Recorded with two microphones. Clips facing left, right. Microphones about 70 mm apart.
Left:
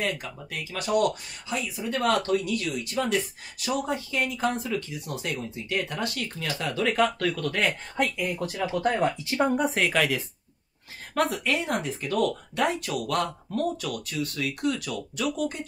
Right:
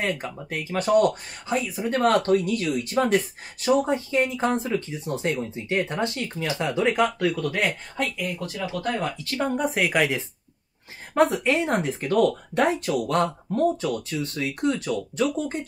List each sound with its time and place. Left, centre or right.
0.0 s speech: right; by 7.7 s centre
8.4 s speech: centre
9.6 s speech: centre
9.9 s speech: centre